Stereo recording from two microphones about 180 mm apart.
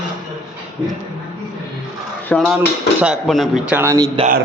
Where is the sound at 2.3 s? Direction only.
Centre (ahead or behind); by 4.1 s 15° right (ahead or behind).